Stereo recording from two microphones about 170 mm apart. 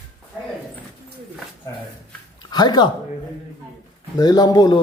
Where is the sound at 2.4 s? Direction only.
25° left (ahead or behind).